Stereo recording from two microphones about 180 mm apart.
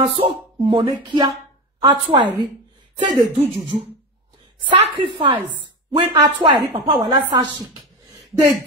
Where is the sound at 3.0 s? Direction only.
25° right (ahead or behind).